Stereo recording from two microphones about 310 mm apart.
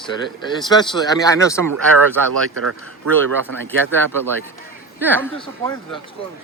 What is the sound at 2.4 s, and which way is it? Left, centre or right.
Speech, right.